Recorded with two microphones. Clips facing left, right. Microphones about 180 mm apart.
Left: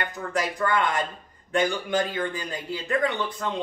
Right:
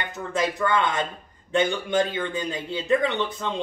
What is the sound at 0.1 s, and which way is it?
Speech, 25° right (ahead or behind).